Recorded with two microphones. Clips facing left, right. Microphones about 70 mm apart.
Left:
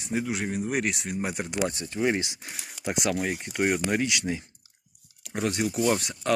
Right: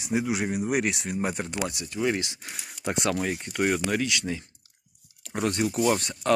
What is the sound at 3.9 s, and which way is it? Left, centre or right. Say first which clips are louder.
Speech: left 1 dB; left.